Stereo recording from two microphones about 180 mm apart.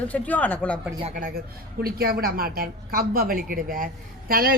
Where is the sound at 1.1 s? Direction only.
50° right (ahead or behind).